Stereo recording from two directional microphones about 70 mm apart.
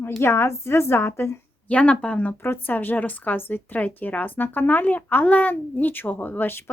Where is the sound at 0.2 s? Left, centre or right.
Left.